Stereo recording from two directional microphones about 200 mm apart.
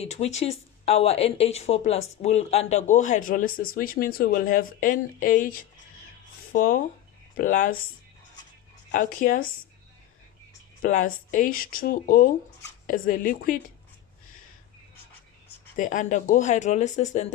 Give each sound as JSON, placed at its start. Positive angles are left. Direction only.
{"t": 0.0, "sound": "speech", "side_deg": 30}
{"t": 8.9, "sound": "speech", "side_deg": 40}
{"t": 11.3, "sound": "speech", "side_deg": 40}
{"t": 15.8, "sound": "speech", "side_deg": 40}